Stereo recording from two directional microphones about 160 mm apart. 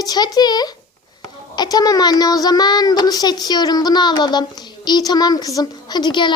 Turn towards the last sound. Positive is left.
turn(degrees=30)  # may be behind; listen again after turning